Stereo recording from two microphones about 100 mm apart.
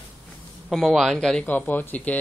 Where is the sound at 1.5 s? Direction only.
15° left (ahead or behind).